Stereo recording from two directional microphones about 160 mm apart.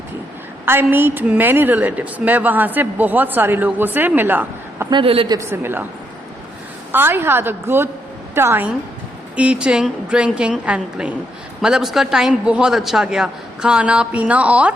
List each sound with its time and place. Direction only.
0.6 s a woman's voice: 15° right (ahead or behind)
4.9 s a woman's voice: 30° right (ahead or behind)
5.4 s a woman's voice: 15° right (ahead or behind)
6.9 s a woman's voice: 15° right (ahead or behind)